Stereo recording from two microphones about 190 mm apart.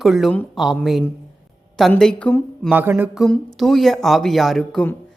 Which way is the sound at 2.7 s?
10° right (ahead or behind).